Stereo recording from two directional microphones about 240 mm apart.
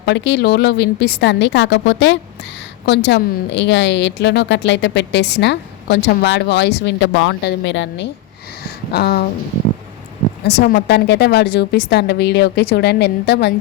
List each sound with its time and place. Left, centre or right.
0.0 s speech: left
10.4 s speech: left